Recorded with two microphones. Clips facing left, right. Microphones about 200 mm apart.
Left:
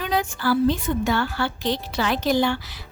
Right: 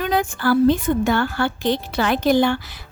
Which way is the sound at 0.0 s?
50° right (ahead or behind).